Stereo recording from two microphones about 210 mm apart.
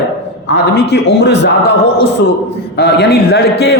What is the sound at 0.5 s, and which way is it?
Speech, 50° left (ahead or behind).